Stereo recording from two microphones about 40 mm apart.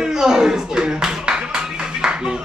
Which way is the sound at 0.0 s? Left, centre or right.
Centre.